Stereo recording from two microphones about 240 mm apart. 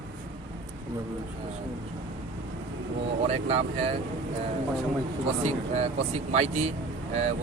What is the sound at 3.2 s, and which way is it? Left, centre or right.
Speech, right.